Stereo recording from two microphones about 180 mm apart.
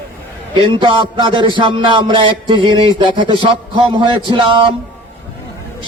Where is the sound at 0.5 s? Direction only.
25° right (ahead or behind).